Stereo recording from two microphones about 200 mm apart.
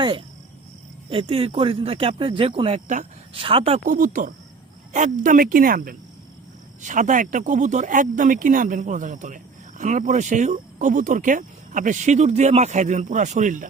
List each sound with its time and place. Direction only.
1.1 s speech: 30° right (ahead or behind)
3.8 s speech: 40° right (ahead or behind)